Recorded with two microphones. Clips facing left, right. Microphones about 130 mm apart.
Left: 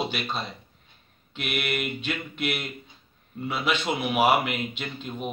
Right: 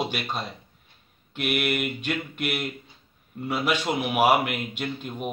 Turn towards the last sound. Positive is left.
turn(degrees=-10)  # may be behind; listen again after turning